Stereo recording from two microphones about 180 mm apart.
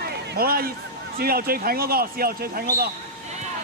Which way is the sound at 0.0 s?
60° right (ahead or behind).